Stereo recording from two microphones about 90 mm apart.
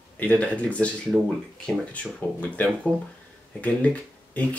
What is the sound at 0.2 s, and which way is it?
Speech, 15° left (ahead or behind).